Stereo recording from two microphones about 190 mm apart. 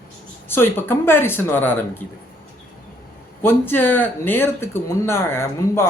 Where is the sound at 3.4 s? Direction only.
10° left (ahead or behind).